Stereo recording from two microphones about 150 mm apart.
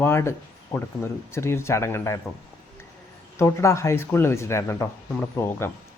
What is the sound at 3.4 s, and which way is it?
Speech, 20° left (ahead or behind).